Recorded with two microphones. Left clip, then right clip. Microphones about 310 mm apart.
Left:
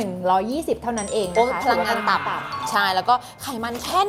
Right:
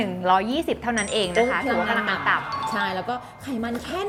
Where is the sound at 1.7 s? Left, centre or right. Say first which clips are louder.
Left 3 dB; left.